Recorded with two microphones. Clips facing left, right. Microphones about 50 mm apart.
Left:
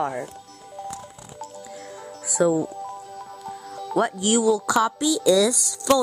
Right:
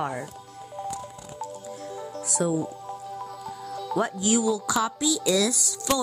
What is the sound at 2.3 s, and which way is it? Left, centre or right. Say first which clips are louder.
Speech: left 6 dB; left.